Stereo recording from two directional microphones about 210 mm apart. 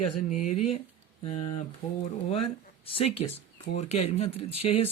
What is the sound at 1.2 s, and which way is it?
Speech, 25° left (ahead or behind).